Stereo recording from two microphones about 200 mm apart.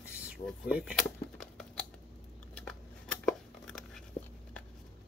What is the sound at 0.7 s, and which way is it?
Speech, 5° right (ahead or behind).